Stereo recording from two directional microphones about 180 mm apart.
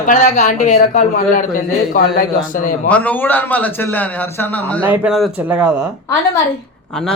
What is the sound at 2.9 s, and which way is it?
Speech, 10° left (ahead or behind).